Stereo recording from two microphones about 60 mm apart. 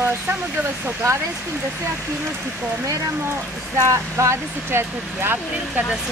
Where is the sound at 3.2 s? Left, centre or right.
Right.